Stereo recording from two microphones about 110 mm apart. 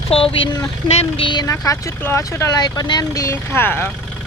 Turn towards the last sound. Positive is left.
turn(degrees=15)  # may be behind; listen again after turning